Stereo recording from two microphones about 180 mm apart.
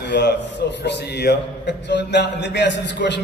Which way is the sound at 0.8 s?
70° left (ahead or behind).